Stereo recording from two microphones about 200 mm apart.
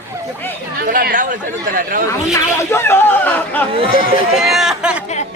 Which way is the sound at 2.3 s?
10° left (ahead or behind).